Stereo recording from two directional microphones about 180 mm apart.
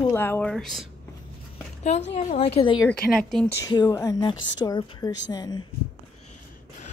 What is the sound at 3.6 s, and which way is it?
A woman's voice, 20° left (ahead or behind).